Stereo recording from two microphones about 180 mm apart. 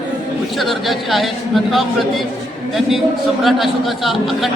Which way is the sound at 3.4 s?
Centre (ahead or behind).